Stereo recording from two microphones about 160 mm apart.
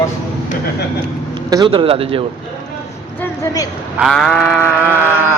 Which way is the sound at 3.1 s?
20° left (ahead or behind).